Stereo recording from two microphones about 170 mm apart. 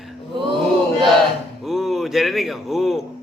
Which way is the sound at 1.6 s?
Centre (ahead or behind).